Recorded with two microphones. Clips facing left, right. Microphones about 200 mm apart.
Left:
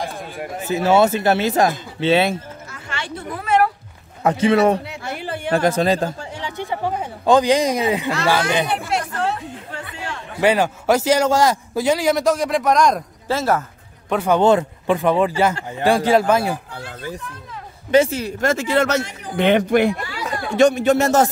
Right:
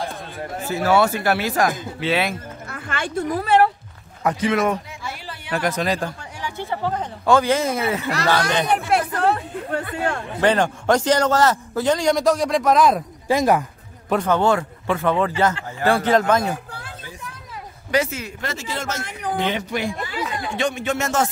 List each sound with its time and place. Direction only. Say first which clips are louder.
0.0 s speech: left 1 dB; 15° left (ahead or behind)
2.7 s speech: right 5 dB; 50° right (ahead or behind)
3.4 s a sound: even; 30° right (ahead or behind)
4.2 s speech: left 5 dB; 25° left (ahead or behind)
4.8 s a sound: left 6 dB; 60° left (ahead or behind)
5.5 s speech: left 5 dB; 30° left (ahead or behind); by 8.6 s 10° left (ahead or behind)
8.9 s chatter: right 4 dB; 55° right (ahead or behind)
10.4 s speech: left 2 dB; 10° left (ahead or behind)
13.3 s speech: right 2 dB; 15° right (ahead or behind)
14.2 s speech: left 5 dB; 15° left (ahead or behind)
17.9 s speech: left 6 dB; 30° left (ahead or behind)
18.4 s speech: left 13 dB; 50° left (ahead or behind)
20.5 s speech: left 10 dB; 40° left (ahead or behind)